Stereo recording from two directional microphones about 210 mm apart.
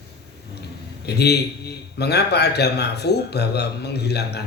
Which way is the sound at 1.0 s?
50° left (ahead or behind).